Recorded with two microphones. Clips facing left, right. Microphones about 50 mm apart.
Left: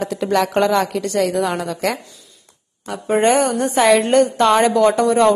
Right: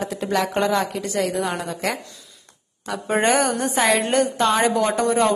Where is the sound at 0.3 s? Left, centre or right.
Centre.